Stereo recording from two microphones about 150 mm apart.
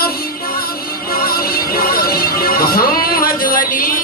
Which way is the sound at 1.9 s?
80° left.